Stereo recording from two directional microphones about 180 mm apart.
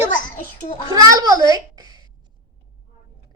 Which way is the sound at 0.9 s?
20° right (ahead or behind).